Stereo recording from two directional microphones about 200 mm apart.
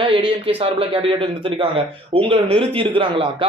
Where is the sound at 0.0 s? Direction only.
25° right (ahead or behind).